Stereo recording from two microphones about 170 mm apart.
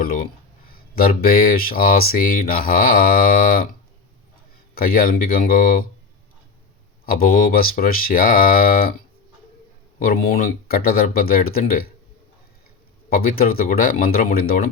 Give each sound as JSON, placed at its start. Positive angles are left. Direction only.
{"t": 0.0, "sound": "speech", "side_deg": 55}
{"t": 4.7, "sound": "speech", "side_deg": 60}
{"t": 7.0, "sound": "speech", "side_deg": 60}
{"t": 10.1, "sound": "speech", "side_deg": 60}
{"t": 13.1, "sound": "speech", "side_deg": 60}